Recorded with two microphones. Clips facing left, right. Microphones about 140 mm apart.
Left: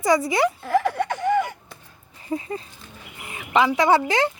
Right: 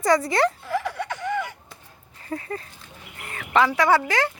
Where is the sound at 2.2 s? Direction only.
15° left (ahead or behind).